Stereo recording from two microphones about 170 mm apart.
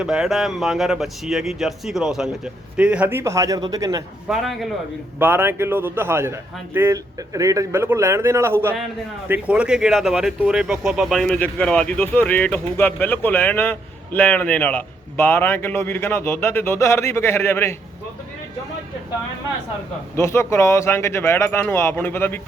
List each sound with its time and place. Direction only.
0.0 s speech: 5° right (ahead or behind); by 4.0 s 20° right (ahead or behind)
4.3 s speech: centre (ahead or behind)
5.2 s a man's voice: 15° right (ahead or behind); by 17.7 s 15° left (ahead or behind)
20.1 s speech: 15° left (ahead or behind)